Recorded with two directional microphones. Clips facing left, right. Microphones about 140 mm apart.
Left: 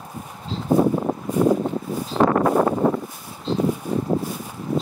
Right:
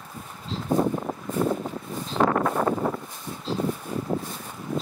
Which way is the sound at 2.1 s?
35° left (ahead or behind).